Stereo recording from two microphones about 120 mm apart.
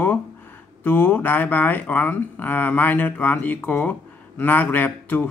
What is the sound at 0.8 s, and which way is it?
Speech, 15° left (ahead or behind).